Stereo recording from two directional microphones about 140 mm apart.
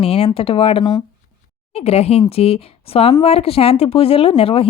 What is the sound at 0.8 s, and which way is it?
Speech, 30° left (ahead or behind).